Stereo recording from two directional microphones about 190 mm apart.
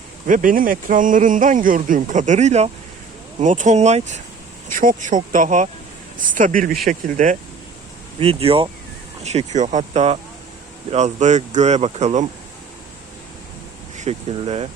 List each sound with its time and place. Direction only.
0.3 s speech: 45° right (ahead or behind)
8.2 s speech: 30° right (ahead or behind)
13.9 s speech: 35° right (ahead or behind)